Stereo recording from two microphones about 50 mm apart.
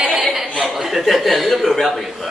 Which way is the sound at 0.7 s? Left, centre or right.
Centre.